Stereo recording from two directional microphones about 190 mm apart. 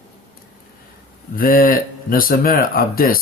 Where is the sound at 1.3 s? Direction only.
50° left (ahead or behind).